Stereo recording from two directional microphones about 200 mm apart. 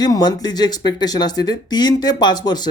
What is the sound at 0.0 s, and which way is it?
Speech, 20° left (ahead or behind).